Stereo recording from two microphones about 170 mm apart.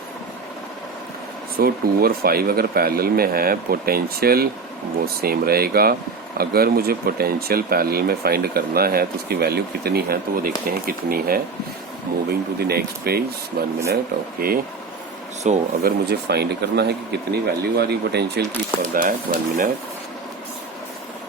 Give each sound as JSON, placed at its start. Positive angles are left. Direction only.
{"t": 1.5, "sound": "speech", "side_deg": -60}
{"t": 15.4, "sound": "speech", "side_deg": -45}
{"t": 15.8, "sound": "speech", "side_deg": -70}
{"t": 18.9, "sound": "speech", "side_deg": -50}